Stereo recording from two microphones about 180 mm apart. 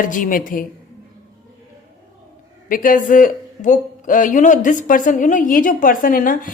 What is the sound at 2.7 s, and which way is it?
Speech, 50° left (ahead or behind).